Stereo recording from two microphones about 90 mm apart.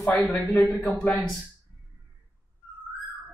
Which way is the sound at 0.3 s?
20° left (ahead or behind).